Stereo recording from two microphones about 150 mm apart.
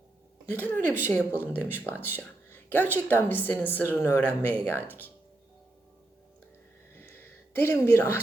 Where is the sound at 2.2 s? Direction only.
15° left (ahead or behind).